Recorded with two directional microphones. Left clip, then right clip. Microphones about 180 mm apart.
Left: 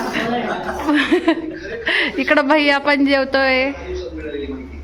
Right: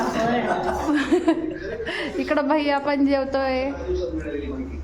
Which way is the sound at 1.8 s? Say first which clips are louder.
Left 11 dB; 5° left (ahead or behind).